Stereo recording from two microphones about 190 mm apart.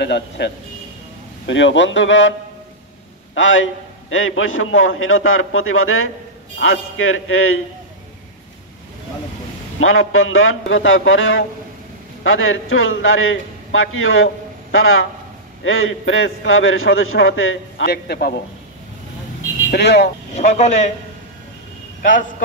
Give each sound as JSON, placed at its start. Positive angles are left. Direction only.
{"t": 0.0, "sound": "a man's voice", "side_deg": 65}
{"t": 3.3, "sound": "a man's voice", "side_deg": 90}
{"t": 9.8, "sound": "a man's voice", "side_deg": 90}
{"t": 17.9, "sound": "a man's voice", "side_deg": 55}
{"t": 19.7, "sound": "a man's voice", "side_deg": 65}
{"t": 20.3, "sound": "speech", "side_deg": 40}